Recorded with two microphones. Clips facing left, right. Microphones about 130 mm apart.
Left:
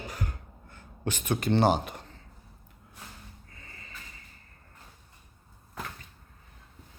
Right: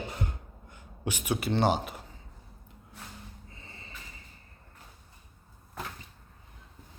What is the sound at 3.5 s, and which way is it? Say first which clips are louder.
Snort: right 1 dB; 25° right (ahead or behind).